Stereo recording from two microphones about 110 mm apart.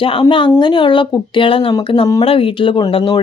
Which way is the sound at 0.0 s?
50° left (ahead or behind).